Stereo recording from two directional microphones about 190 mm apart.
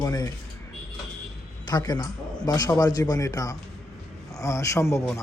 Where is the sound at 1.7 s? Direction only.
20° left (ahead or behind).